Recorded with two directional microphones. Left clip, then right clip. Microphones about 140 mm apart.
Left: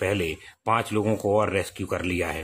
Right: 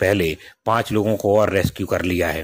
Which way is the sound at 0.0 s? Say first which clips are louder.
Right 7 dB; 35° right (ahead or behind).